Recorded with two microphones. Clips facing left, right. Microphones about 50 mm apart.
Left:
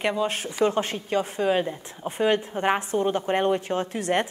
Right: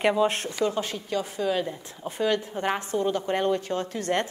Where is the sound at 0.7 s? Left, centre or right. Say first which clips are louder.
Left 3 dB; left.